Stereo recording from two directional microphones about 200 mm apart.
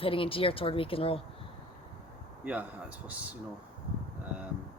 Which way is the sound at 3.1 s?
5° right (ahead or behind).